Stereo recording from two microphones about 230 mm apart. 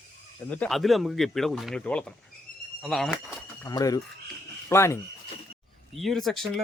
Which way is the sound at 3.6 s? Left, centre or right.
Centre.